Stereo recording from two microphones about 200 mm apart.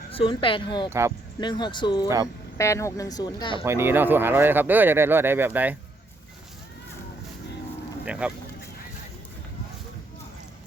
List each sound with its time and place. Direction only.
0.1 s speech: 25° left (ahead or behind)
0.9 s speech: 15° right (ahead or behind)
1.4 s speech: 20° left (ahead or behind)
3.6 s speech: 10° right (ahead or behind)
8.0 s speech: 5° right (ahead or behind)